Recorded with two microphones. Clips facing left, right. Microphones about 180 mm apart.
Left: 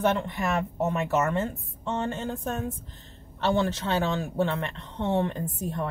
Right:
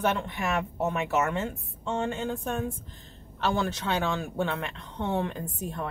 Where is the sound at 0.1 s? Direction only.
Centre (ahead or behind).